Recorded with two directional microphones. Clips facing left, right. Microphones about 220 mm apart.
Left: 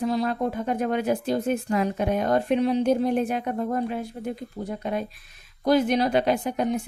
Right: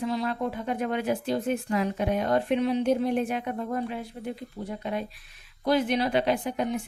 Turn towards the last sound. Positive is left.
turn(degrees=40)  # may be behind; listen again after turning